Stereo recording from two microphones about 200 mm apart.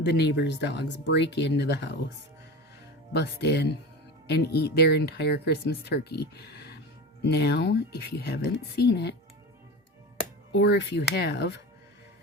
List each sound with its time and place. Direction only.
0.0 s speech: 60° left (ahead or behind)
3.1 s speech: 55° left (ahead or behind)
10.5 s speech: 55° left (ahead or behind)